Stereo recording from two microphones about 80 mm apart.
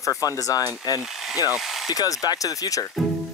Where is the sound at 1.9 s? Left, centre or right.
Left.